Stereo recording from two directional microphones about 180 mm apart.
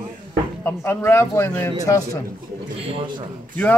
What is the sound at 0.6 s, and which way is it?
Speech, 10° left (ahead or behind).